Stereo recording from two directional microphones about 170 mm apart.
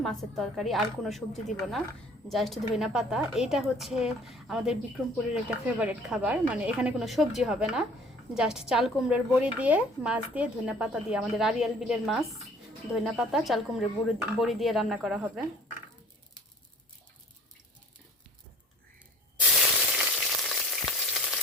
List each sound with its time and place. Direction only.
0.0 s a woman's voice: centre (ahead or behind)
19.5 s frying: centre (ahead or behind)